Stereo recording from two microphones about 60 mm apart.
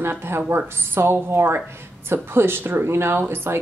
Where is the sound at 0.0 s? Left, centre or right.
Right.